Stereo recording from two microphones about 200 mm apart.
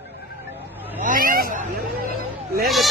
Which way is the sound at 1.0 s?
45° right (ahead or behind).